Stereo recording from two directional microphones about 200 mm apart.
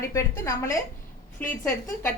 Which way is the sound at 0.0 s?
15° left (ahead or behind).